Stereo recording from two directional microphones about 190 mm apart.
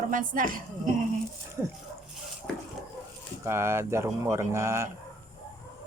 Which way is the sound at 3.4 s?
15° right (ahead or behind).